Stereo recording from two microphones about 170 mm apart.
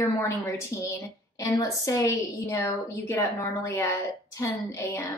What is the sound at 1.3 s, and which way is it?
A woman's voice, 20° left (ahead or behind).